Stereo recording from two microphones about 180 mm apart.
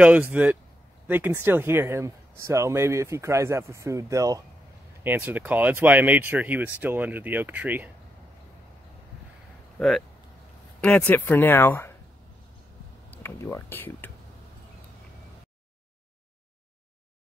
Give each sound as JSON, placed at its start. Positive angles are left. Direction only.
{"t": 0.0, "sound": "speech", "side_deg": -10}
{"t": 9.8, "sound": "speech", "side_deg": 0}
{"t": 13.1, "sound": "speech", "side_deg": 15}